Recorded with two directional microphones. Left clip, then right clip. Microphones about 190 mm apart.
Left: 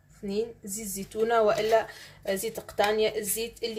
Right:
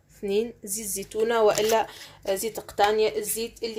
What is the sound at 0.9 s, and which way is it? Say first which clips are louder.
Speech: right 1 dB; 40° right (ahead or behind).